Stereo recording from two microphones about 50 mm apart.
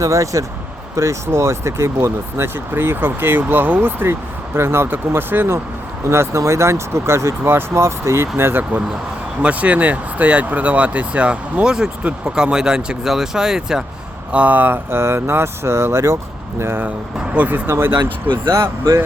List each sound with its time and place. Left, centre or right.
0.1 s speech: right
0.9 s speech: right
4.9 s speech: right
6.1 s speech: right
9.4 s speech: right; by 13.8 s centre
14.3 s speech: right
17.3 s speech: right
17.7 s speech: right